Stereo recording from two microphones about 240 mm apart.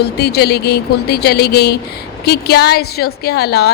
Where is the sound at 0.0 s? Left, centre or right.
Left.